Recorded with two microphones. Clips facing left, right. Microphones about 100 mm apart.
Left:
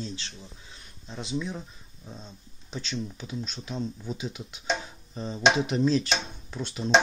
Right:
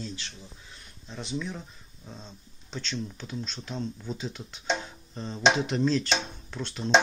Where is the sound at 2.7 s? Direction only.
15° left (ahead or behind).